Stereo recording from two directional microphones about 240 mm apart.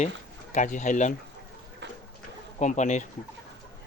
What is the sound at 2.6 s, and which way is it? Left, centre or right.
Speech, left.